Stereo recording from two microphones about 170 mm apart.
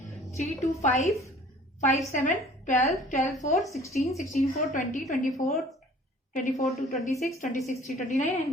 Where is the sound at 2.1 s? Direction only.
50° left (ahead or behind).